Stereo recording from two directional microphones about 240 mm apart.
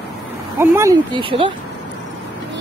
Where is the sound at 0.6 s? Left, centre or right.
Centre.